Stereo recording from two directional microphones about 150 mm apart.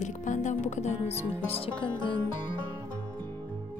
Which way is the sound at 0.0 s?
55° left (ahead or behind).